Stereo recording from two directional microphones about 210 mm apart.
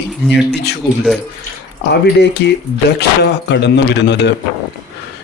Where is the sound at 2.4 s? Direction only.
50° left (ahead or behind).